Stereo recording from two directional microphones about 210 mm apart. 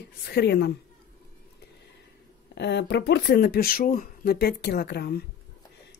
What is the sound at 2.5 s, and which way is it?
Speech, 55° left (ahead or behind).